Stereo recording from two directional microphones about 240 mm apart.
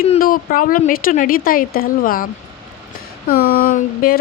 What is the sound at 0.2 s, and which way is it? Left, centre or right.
A woman's voice, left.